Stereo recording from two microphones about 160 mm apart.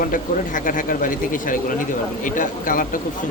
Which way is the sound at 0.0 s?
55° left (ahead or behind).